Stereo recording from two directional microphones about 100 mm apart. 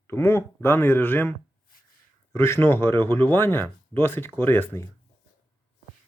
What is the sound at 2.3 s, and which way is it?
Speech, 25° left (ahead or behind).